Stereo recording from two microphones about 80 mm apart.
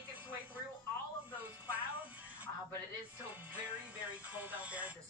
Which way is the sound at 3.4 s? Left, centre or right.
Right.